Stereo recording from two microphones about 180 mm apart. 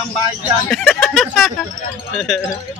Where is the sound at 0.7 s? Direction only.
5° left (ahead or behind).